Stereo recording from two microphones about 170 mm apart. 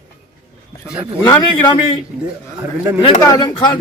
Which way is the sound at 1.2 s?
25° left (ahead or behind).